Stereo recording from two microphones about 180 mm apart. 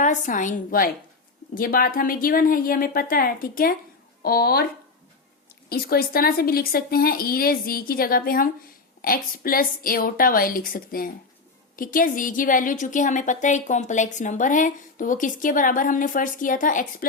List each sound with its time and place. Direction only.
0.0 s a woman's voice: 45° left (ahead or behind)
5.6 s a woman's voice: 55° left (ahead or behind)